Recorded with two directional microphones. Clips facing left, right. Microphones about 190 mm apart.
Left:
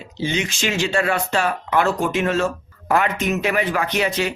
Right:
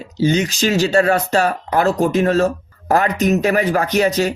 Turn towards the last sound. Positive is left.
turn(degrees=-40)  # may be behind; listen again after turning